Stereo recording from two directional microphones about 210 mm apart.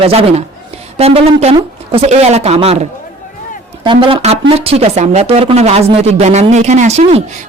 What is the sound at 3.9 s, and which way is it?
Speech, 25° right (ahead or behind).